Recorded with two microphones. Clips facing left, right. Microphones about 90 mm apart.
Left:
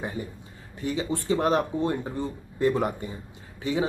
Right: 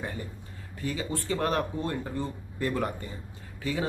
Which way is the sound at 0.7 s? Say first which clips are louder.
Left 4 dB; 20° left (ahead or behind).